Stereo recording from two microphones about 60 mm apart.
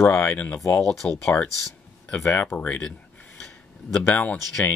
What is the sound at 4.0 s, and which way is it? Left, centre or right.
Speech, left.